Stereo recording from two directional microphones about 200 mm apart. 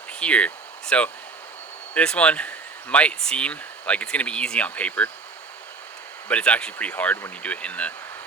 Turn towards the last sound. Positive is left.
turn(degrees=5)  # may be behind; listen again after turning